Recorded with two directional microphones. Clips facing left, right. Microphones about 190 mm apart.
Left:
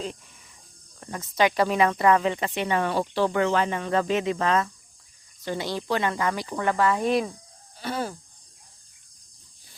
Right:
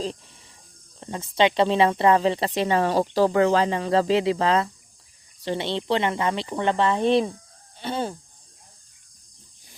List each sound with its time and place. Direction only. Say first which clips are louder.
0.9 s speech: right 2 dB; 25° right (ahead or behind)